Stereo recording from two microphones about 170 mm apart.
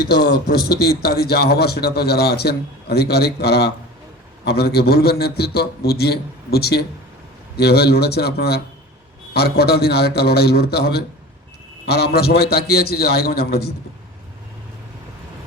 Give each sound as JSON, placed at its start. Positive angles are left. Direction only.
{"t": 0.1, "sound": "a man's voice", "side_deg": 75}